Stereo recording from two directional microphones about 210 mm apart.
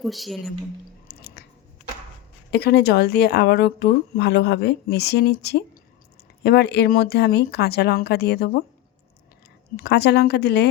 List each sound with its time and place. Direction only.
0.0 s speech: centre (ahead or behind)
1.0 s chewing: 50° left (ahead or behind)
2.5 s speech: 50° left (ahead or behind)
9.7 s speech: 50° left (ahead or behind)